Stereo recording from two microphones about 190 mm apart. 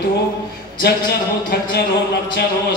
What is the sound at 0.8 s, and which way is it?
Speech, 60° left (ahead or behind).